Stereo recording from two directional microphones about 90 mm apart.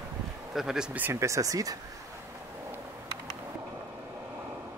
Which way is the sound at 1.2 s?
40° right (ahead or behind).